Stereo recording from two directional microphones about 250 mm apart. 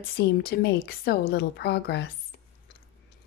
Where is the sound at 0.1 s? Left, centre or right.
Left.